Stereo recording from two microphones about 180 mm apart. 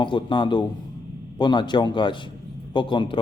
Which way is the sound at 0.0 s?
25° left (ahead or behind).